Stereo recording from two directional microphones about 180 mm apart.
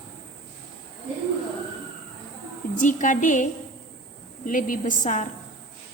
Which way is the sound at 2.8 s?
45° left (ahead or behind).